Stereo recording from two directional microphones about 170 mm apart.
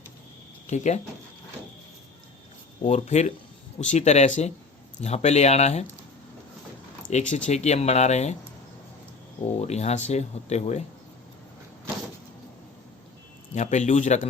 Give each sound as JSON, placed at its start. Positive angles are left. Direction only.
{"t": 0.7, "sound": "a man's voice", "side_deg": 40}
{"t": 2.8, "sound": "speech", "side_deg": 40}
{"t": 7.1, "sound": "speech", "side_deg": 45}
{"t": 9.6, "sound": "speech", "side_deg": 40}
{"t": 13.5, "sound": "a man's voice", "side_deg": 45}